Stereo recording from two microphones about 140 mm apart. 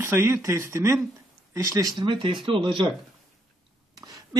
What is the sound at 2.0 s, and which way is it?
Speech, 35° right (ahead or behind).